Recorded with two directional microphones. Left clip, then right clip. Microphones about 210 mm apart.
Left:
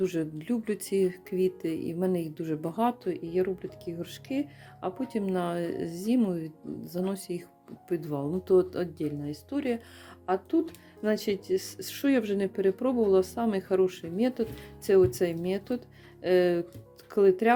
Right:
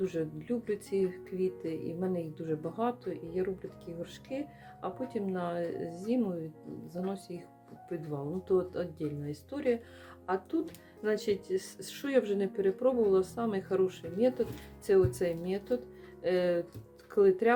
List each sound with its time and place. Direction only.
0.0 s speech: 45° left (ahead or behind)